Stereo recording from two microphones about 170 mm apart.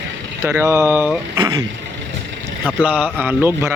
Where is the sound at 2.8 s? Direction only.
5° right (ahead or behind).